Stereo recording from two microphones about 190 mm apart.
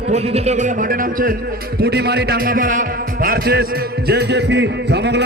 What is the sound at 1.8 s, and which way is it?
A man's voice, 60° right (ahead or behind).